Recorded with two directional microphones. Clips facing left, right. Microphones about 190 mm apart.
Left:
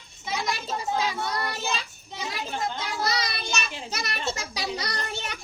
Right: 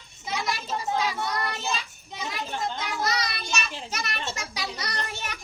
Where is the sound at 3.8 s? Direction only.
35° left (ahead or behind).